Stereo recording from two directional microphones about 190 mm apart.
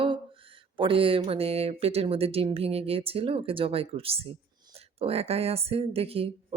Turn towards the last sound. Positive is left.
turn(degrees=-30)  # may be behind; listen again after turning